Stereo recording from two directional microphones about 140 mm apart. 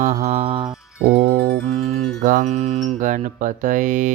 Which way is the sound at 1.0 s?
90° right.